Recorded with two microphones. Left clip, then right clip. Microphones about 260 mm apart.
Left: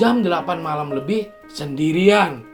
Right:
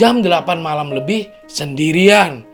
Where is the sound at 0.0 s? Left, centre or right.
Right.